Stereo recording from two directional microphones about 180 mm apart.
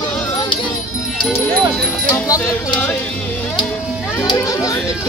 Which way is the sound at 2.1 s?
15° left (ahead or behind).